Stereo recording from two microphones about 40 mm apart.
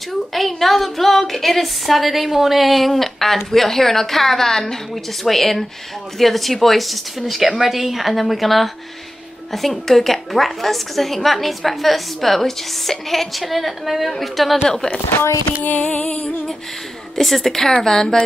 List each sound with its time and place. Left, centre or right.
0.3 s a woman's voice: centre
15.6 s music: left
15.9 s music: left
17.1 s a woman's voice: centre